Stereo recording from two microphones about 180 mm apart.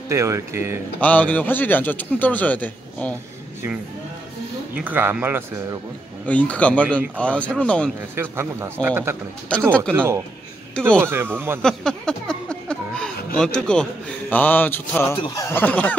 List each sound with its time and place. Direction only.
0.1 s speech: 15° right (ahead or behind)
1.0 s a man's voice: 10° left (ahead or behind)
4.7 s speech: 10° right (ahead or behind)
6.2 s a man's voice: 5° left (ahead or behind)
8.2 s speech: 15° right (ahead or behind)
9.7 s a man's voice: 5° left (ahead or behind)
9.9 s speech: 15° right (ahead or behind)
10.7 s speech: 5° left (ahead or behind)
11.0 s speech: 15° right (ahead or behind)
11.6 s a sound: 5° left (ahead or behind)
13.4 s a man's voice: 5° left (ahead or behind)
15.1 s speech: 25° left (ahead or behind)
15.4 s a man's voice: 10° left (ahead or behind)